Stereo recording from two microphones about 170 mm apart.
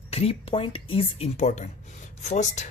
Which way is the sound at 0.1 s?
35° left (ahead or behind).